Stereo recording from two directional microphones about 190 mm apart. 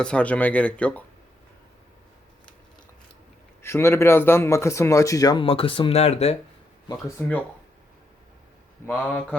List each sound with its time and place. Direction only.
0.0 s a man's voice: 5° left (ahead or behind)
3.6 s a man's voice: 15° left (ahead or behind); by 6.3 s 35° left (ahead or behind)
6.8 s a man's voice: 10° left (ahead or behind)
8.9 s speech: centre (ahead or behind)